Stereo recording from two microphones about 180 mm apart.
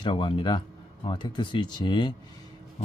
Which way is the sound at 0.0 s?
30° left (ahead or behind).